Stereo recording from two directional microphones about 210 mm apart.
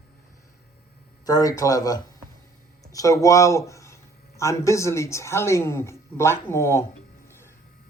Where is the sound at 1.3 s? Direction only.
15° left (ahead or behind).